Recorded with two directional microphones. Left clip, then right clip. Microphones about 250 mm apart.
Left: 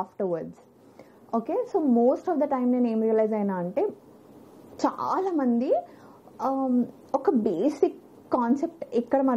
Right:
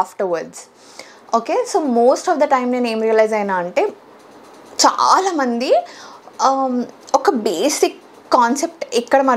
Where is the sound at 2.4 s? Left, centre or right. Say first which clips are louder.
Right 9 dB; centre.